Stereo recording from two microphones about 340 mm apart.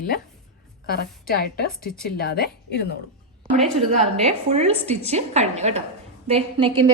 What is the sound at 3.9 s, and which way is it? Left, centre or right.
A woman's voice, centre.